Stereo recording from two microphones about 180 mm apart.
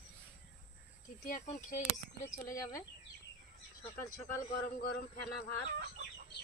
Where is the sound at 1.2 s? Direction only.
40° left (ahead or behind).